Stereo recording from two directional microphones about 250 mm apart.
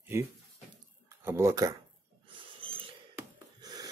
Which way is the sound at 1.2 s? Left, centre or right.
Centre.